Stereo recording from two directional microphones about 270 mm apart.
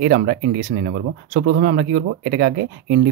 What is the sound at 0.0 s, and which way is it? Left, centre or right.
Speech, right.